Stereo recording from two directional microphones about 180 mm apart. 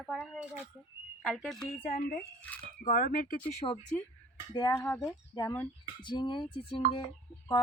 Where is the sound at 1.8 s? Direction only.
40° left (ahead or behind).